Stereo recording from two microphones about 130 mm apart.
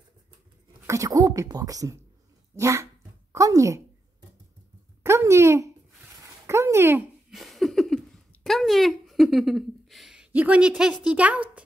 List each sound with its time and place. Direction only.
0.8 s a woman's voice: 25° right (ahead or behind)
5.0 s speech: 20° right (ahead or behind)
6.2 s dog: 20° right (ahead or behind)
7.2 s a sound: centre (ahead or behind)
8.5 s a woman's voice: centre (ahead or behind)